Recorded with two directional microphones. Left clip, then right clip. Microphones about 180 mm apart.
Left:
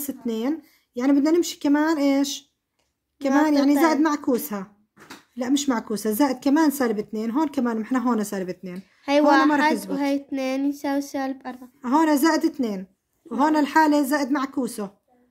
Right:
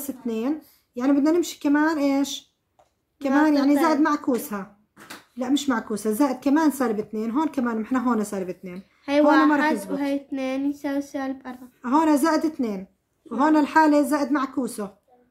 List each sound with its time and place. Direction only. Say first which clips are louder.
0.0 s speech: left 1 dB; 40° left (ahead or behind)